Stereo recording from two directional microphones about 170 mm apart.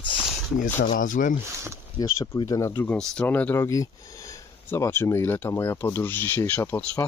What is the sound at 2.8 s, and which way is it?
Speech, 5° left (ahead or behind).